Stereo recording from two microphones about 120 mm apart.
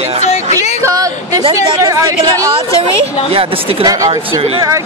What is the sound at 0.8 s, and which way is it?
A woman's voice, 30° right (ahead or behind).